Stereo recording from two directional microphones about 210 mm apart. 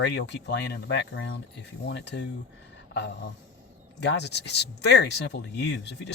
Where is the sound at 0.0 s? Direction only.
55° left (ahead or behind).